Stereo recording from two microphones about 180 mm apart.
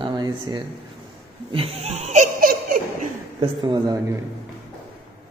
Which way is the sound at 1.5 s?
35° right (ahead or behind).